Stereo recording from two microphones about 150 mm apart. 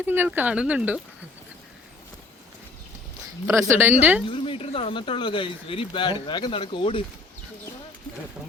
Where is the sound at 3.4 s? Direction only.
15° right (ahead or behind).